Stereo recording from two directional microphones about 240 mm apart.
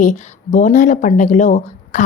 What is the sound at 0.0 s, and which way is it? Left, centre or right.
Speech, left.